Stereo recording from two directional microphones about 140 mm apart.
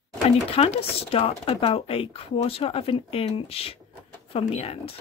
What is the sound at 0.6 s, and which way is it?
Speech, 45° left (ahead or behind).